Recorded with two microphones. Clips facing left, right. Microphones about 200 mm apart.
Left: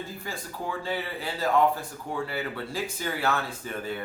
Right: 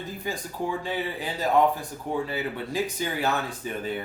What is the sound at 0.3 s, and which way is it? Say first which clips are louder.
Speech: right 6 dB; 15° right (ahead or behind).